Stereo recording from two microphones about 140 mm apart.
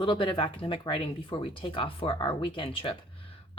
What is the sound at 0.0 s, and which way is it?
Speech, 35° left (ahead or behind).